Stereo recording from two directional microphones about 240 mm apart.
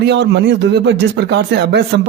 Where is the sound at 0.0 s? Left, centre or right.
Right.